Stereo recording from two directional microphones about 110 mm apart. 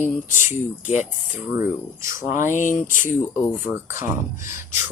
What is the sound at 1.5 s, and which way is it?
Speech, 25° right (ahead or behind).